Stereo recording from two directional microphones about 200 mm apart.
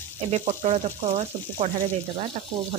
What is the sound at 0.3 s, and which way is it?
Speech, 30° right (ahead or behind).